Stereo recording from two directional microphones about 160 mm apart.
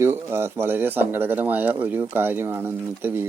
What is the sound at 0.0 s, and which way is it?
Speech, 15° right (ahead or behind).